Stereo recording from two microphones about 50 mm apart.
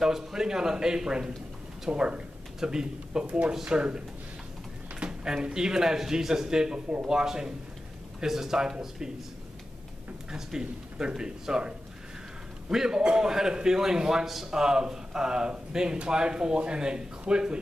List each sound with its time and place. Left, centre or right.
0.0 s a man's voice: centre
3.3 s a man's voice: right
5.0 s a man's voice: centre
10.3 s a man's voice: centre